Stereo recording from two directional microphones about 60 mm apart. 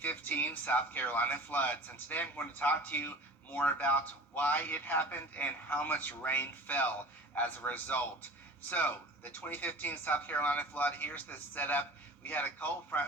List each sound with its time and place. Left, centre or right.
0.0 s a man's voice: left